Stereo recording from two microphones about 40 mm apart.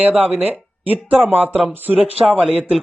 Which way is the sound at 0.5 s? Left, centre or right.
Right.